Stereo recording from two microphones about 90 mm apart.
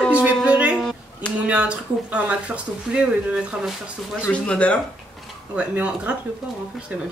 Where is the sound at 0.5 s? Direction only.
15° right (ahead or behind).